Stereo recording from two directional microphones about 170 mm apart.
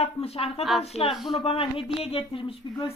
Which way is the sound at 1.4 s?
35° left (ahead or behind).